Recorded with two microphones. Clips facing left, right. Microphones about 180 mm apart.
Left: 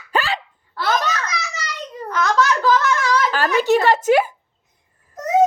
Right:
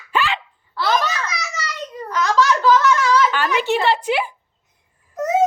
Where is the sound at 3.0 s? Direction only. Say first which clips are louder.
Right 2 dB; 40° left (ahead or behind).